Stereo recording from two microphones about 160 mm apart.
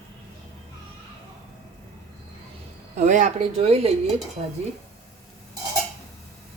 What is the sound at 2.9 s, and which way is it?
A woman's voice, 50° right (ahead or behind).